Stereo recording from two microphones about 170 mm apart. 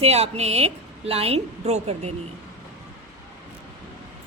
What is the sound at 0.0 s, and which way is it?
A woman's voice, 40° right (ahead or behind).